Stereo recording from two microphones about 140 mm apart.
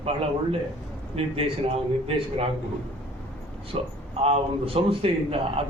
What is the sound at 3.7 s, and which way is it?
A man's voice, 45° right (ahead or behind).